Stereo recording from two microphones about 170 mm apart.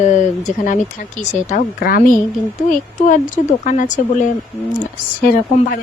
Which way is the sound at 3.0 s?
50° left (ahead or behind).